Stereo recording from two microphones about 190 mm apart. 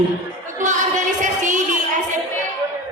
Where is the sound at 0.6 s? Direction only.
40° right (ahead or behind).